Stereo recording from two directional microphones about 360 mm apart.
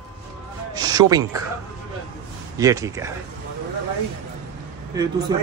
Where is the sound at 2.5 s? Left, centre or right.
Centre.